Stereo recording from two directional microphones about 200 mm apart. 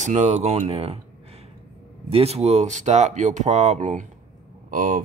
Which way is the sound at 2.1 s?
30° right (ahead or behind).